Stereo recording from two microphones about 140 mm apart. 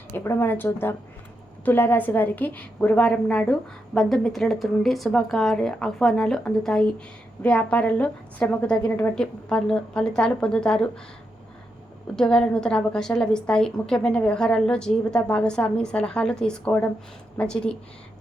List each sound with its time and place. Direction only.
0.1 s a woman's voice: 15° left (ahead or behind)
12.1 s a woman's voice: 5° left (ahead or behind)